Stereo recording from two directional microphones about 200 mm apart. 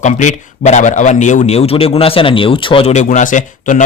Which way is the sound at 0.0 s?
35° left (ahead or behind).